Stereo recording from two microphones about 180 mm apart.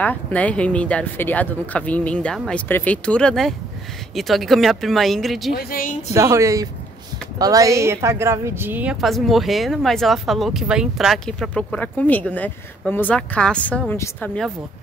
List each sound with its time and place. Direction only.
0.0 s a woman's voice: 10° left (ahead or behind)
5.6 s a woman's voice: 50° left (ahead or behind)
6.1 s a woman's voice: 15° right (ahead or behind); by 14.5 s 5° left (ahead or behind)